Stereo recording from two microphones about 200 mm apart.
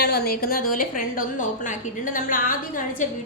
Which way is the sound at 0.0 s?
50° left (ahead or behind).